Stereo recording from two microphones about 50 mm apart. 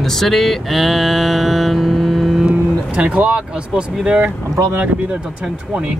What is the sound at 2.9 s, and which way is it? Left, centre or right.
Speech, right.